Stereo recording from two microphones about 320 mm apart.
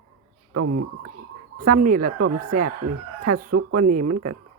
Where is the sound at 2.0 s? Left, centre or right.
Right.